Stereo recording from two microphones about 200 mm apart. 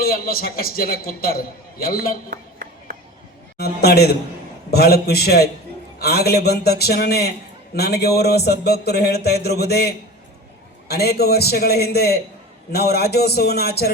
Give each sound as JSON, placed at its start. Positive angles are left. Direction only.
{"t": 0.0, "sound": "speech", "side_deg": 50}
{"t": 2.3, "sound": "a sound", "side_deg": -45}
{"t": 3.6, "sound": "speech", "side_deg": 55}